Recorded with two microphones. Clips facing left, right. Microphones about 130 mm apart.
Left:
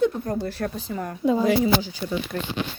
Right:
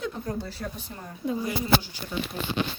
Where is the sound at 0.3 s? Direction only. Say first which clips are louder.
Left 6 dB; 60° left (ahead or behind); by 1.7 s 90° left.